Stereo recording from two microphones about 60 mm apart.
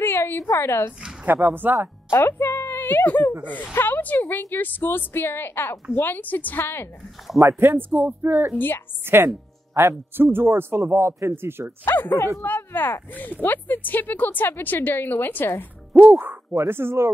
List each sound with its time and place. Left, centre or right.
0.0 s a sound: left
1.2 s speech: right
2.0 s music: left
3.1 s a woman's voice: left
7.5 s speech: right
8.5 s a woman's voice: left
9.0 s a man's voice: right
11.8 s a woman's voice: left
16.0 s a man's voice: right